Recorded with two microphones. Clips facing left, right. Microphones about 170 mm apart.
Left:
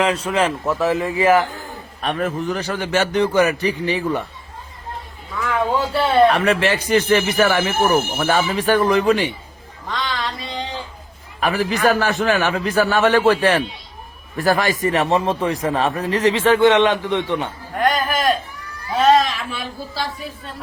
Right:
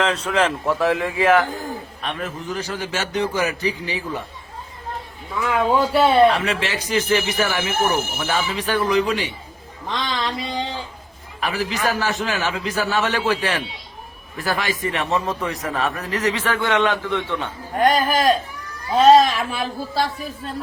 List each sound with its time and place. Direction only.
0.0 s a man's voice: 10° left (ahead or behind)
2.0 s a man's voice: 50° left (ahead or behind)
5.5 s speech: 15° right (ahead or behind)
6.3 s a man's voice: 55° left (ahead or behind)
9.9 s speech: 20° right (ahead or behind)
11.3 s a man's voice: 50° left (ahead or behind)
15.1 s a man's voice: 30° left (ahead or behind)
17.7 s speech: 35° right (ahead or behind)